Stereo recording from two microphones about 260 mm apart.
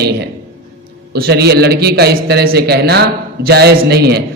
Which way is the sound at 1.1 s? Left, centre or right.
Right.